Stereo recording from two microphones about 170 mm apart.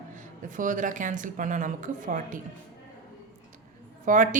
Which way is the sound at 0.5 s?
50° right (ahead or behind).